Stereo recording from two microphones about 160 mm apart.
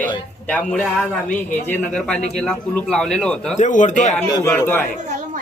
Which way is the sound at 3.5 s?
50° left (ahead or behind).